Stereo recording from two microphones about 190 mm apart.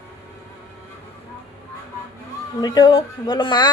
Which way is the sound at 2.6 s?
20° left (ahead or behind).